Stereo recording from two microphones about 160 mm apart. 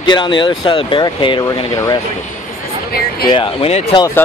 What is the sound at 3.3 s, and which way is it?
Speech, 35° left (ahead or behind).